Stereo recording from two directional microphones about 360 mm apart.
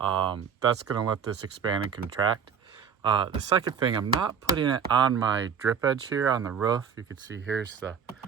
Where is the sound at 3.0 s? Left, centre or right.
Centre.